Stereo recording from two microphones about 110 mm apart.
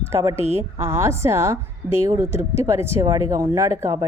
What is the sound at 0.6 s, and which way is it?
Speech, 25° right (ahead or behind).